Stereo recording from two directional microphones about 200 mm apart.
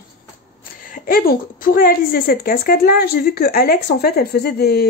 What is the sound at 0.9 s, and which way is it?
A woman's voice, 45° left (ahead or behind).